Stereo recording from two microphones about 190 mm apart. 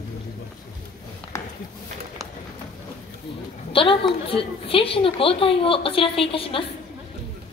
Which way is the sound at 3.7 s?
30° left (ahead or behind).